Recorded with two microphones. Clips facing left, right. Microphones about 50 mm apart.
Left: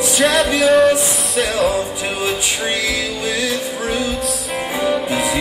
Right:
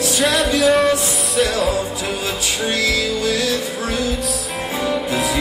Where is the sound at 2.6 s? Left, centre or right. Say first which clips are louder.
Right 5 dB; left.